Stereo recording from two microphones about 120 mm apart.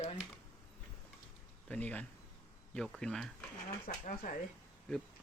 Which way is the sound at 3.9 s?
90° left.